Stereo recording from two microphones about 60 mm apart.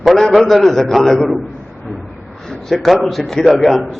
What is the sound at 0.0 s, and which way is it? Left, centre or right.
A man's voice, centre.